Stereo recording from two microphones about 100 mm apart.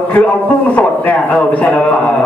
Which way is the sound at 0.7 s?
15° left (ahead or behind).